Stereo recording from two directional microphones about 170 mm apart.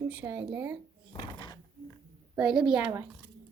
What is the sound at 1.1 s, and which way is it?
Drawer open or close, 25° left (ahead or behind).